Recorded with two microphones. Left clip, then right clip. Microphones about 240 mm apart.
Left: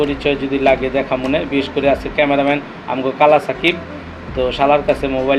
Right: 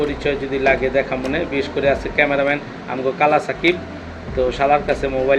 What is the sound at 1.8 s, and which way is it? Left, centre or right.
Speech, left.